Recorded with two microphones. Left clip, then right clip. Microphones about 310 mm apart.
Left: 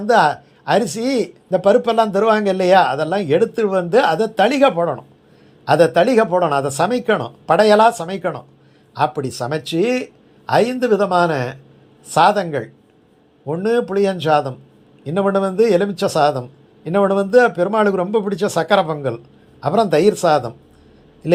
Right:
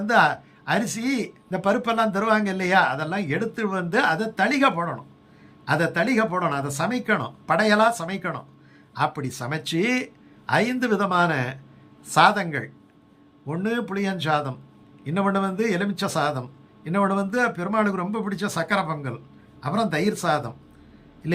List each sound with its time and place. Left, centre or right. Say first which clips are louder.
0.1 s speech: left 5 dB; centre